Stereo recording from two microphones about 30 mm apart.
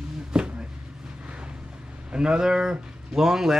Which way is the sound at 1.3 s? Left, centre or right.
Right.